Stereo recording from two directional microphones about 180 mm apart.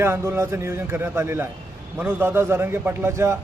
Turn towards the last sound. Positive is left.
turn(degrees=-15)  # may be behind; listen again after turning